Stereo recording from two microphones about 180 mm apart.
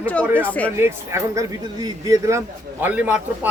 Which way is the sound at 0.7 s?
15° right (ahead or behind).